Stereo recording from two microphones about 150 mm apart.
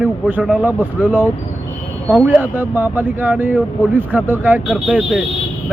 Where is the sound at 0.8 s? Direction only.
15° right (ahead or behind).